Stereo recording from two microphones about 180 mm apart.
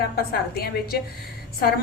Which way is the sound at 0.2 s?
55° left (ahead or behind).